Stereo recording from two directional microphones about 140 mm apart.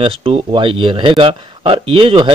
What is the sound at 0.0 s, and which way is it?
Speech, 40° right (ahead or behind).